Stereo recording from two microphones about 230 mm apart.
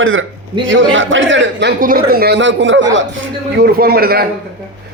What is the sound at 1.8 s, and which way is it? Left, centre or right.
Speech, right.